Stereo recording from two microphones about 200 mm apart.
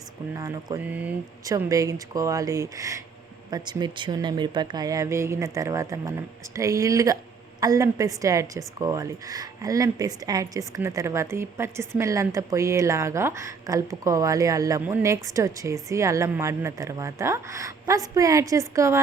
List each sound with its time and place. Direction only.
0.3 s a woman's voice: 15° right (ahead or behind)